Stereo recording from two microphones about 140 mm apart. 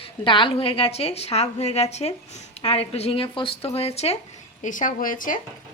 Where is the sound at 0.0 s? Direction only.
35° left (ahead or behind).